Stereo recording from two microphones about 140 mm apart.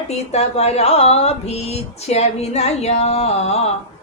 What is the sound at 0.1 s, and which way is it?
Speech, 50° left (ahead or behind).